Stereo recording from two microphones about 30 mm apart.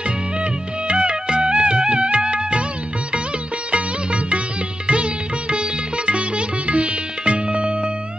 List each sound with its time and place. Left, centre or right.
0.0 s music: right
3.7 s music: right
4.8 s sitar: right